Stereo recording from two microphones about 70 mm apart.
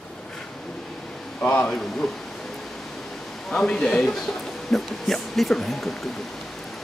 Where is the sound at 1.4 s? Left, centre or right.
Left.